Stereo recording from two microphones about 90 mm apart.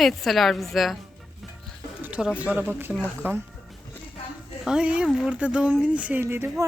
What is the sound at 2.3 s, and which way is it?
Speech, 15° right (ahead or behind).